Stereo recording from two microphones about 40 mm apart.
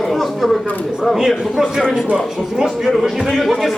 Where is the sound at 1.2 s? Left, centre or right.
Centre.